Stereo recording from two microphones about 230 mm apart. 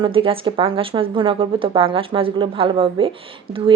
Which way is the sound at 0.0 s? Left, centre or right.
Right.